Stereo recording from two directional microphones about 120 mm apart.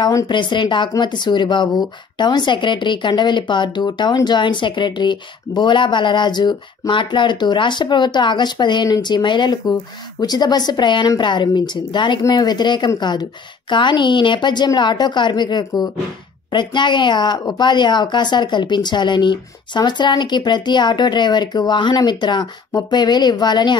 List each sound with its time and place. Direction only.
0.3 s speech: 40° left (ahead or behind)